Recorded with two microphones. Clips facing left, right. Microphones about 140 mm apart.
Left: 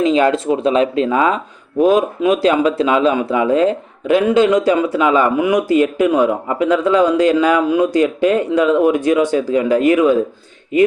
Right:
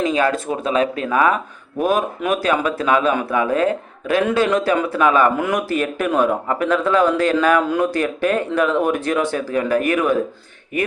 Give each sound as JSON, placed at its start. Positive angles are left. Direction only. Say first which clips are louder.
{"t": 0.0, "sound": "speech", "louder": "left 5 dB", "side_deg": 25}